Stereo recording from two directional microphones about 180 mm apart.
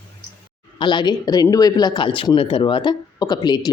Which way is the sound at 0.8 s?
25° left (ahead or behind).